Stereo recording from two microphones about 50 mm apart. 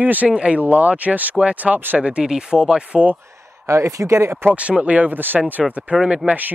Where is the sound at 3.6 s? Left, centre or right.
Right.